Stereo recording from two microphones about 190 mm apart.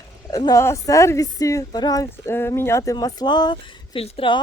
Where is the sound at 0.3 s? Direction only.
20° left (ahead or behind).